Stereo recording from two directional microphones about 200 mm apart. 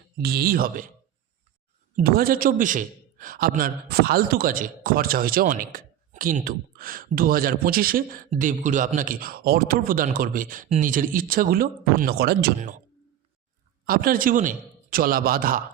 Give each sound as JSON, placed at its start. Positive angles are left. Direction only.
{"t": 0.2, "sound": "a man's voice", "side_deg": -50}
{"t": 2.0, "sound": "a man's voice", "side_deg": -45}
{"t": 13.8, "sound": "a man's voice", "side_deg": -45}